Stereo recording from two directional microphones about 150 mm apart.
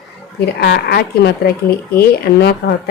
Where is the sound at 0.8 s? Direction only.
90° left.